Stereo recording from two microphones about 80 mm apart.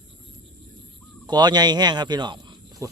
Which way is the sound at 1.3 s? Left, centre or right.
Right.